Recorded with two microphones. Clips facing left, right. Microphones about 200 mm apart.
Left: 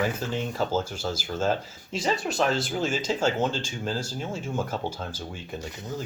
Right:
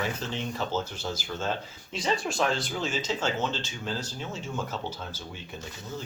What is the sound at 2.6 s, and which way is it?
Speech, 45° left (ahead or behind).